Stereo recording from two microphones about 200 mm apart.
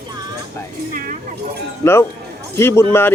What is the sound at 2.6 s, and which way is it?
Speech, 15° left (ahead or behind).